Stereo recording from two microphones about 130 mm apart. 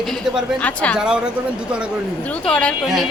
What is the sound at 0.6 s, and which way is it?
Speech, 10° left (ahead or behind).